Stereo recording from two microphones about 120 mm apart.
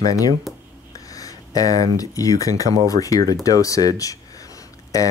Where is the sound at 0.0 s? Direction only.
30° left (ahead or behind).